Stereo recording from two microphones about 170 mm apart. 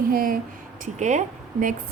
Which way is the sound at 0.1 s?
55° right (ahead or behind).